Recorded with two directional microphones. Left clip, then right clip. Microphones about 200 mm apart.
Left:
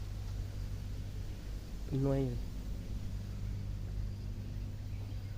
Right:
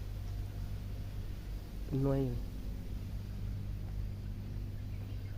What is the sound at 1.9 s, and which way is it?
Speech, 5° right (ahead or behind).